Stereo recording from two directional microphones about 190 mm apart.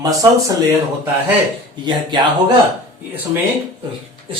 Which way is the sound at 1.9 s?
20° right (ahead or behind).